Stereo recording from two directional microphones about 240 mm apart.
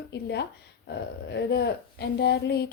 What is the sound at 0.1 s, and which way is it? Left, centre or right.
A woman's voice, left.